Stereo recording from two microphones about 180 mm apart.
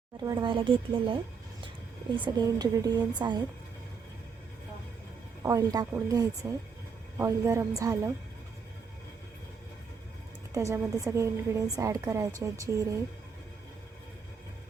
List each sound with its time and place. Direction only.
0.2 s speech: 20° right (ahead or behind)
5.4 s a woman's voice: 20° right (ahead or behind)
10.5 s a woman's voice: 20° right (ahead or behind)